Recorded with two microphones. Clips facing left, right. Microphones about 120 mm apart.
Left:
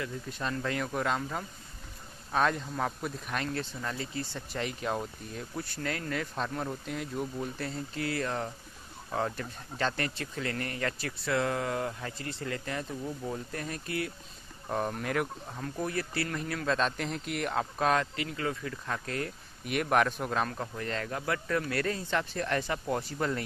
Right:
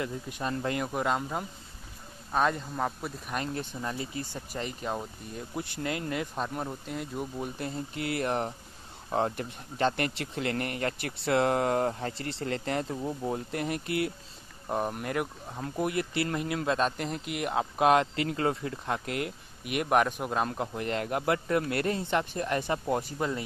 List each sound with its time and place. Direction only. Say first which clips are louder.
0.3 s speech: right 1 dB; 15° right (ahead or behind)
3.5 s speech: right 1 dB; 15° right (ahead or behind)
4.6 s speech: left 1 dB; centre (ahead or behind)
5.5 s speech: right 3 dB; 20° right (ahead or behind)
14.7 s speech: right 1 dB; 10° right (ahead or behind)
15.5 s speech: right 5 dB; 20° right (ahead or behind)
19.2 s speech: right 2 dB; 5° right (ahead or behind)
20.4 s speech: right 4 dB; 25° right (ahead or behind)